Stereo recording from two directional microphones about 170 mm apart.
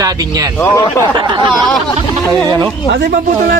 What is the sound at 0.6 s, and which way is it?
Speech, 15° left (ahead or behind).